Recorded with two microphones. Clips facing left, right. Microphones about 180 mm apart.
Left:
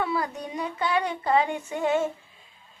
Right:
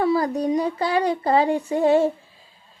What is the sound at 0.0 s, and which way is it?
A woman's voice, 35° right (ahead or behind).